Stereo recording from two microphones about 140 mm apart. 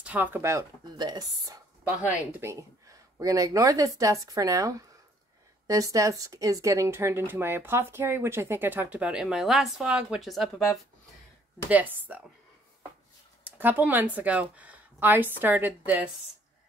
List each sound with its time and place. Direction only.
0.0 s speech: 10° right (ahead or behind); by 1.6 s 30° right (ahead or behind)
1.9 s speech: 10° right (ahead or behind)
11.7 s speech: 10° right (ahead or behind)
13.4 s speech: 15° right (ahead or behind)